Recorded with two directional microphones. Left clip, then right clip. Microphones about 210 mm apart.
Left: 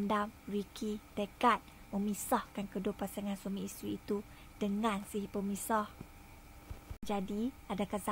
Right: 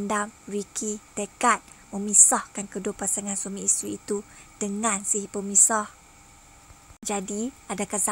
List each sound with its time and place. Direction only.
0.0 s a woman's voice: 35° right (ahead or behind)
7.0 s a woman's voice: 30° right (ahead or behind)